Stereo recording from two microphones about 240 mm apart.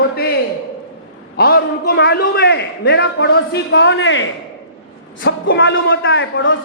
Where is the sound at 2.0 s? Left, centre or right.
Left.